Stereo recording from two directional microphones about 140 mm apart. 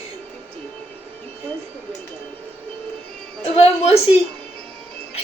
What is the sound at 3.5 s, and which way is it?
Speech, 45° left (ahead or behind).